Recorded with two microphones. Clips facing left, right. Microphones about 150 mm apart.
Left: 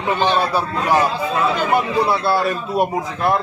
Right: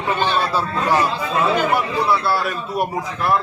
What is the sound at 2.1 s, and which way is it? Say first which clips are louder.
A man's voice: left 2 dB; 25° left (ahead or behind).